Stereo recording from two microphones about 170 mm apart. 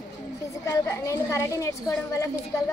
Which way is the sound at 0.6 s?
15° left (ahead or behind).